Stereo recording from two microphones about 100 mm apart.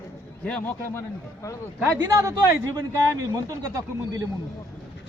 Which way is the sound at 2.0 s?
35° right (ahead or behind).